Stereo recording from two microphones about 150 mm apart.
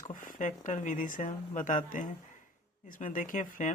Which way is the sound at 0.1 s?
60° left (ahead or behind).